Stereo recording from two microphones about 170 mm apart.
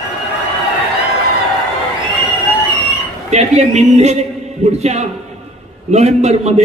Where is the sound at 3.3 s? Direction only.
40° right (ahead or behind).